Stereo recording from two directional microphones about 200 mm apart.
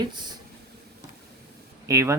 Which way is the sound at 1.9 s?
15° right (ahead or behind).